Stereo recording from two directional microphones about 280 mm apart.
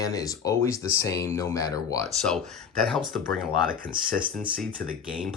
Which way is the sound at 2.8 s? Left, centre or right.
Centre.